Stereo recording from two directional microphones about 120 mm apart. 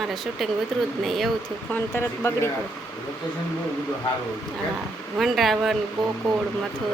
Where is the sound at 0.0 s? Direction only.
Centre (ahead or behind).